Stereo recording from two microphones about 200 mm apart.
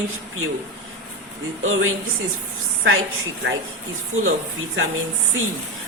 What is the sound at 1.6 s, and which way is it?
Speech, 90° right.